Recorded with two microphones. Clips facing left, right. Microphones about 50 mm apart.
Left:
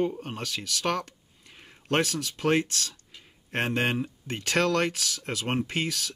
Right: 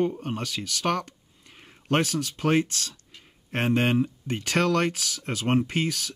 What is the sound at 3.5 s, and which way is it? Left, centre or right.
Speech, centre.